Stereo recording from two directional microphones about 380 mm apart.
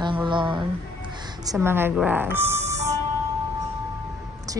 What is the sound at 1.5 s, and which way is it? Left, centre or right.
Speech, centre.